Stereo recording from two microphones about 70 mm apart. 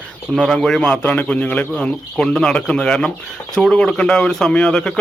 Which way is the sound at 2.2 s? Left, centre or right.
Centre.